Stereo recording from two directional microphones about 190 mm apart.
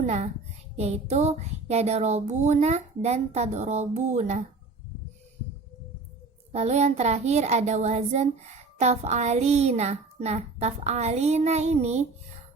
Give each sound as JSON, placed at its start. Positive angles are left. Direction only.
{"t": 0.0, "sound": "a child's voice", "side_deg": -40}
{"t": 0.8, "sound": "child singing", "side_deg": -35}
{"t": 6.5, "sound": "child singing", "side_deg": -35}